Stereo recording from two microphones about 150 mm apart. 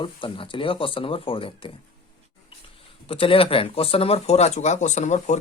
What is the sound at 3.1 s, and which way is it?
Speech, 35° left (ahead or behind).